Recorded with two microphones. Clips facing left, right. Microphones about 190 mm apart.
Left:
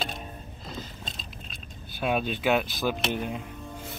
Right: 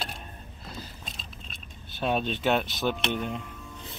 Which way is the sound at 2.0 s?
5° left (ahead or behind).